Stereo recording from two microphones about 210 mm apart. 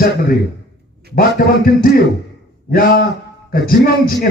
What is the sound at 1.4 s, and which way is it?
Speech, 45° left (ahead or behind).